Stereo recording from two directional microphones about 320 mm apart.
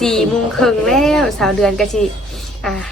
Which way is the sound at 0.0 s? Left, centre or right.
Centre.